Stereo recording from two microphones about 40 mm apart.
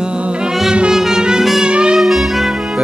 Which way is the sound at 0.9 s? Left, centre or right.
Centre.